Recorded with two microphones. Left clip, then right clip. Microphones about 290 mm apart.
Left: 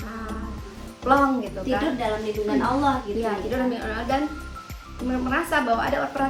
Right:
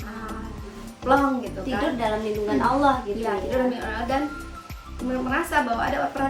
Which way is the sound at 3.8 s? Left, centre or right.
Centre.